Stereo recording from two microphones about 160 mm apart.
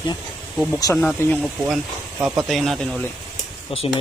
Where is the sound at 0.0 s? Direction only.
25° left (ahead or behind).